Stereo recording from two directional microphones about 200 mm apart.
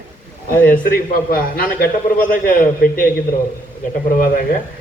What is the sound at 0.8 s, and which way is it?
A man's voice, 45° left (ahead or behind).